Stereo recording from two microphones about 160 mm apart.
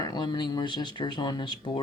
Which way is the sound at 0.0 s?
25° left (ahead or behind).